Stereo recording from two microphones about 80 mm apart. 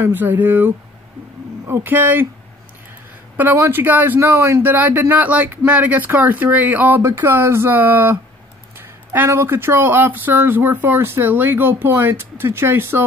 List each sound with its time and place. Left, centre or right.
0.0 s speech: right
3.5 s speech: right
8.7 s a sound: right
9.4 s speech: right